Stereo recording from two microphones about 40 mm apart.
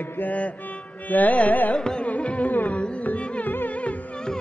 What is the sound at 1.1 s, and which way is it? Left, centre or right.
Carnatic music, left.